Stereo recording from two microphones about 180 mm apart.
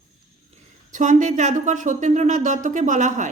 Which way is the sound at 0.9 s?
40° right (ahead or behind).